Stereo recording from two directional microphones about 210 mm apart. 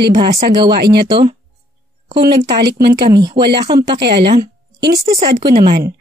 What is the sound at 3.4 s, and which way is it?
Speech, 30° right (ahead or behind).